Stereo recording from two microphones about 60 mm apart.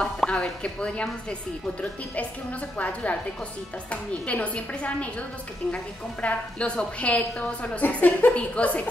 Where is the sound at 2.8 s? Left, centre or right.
Left.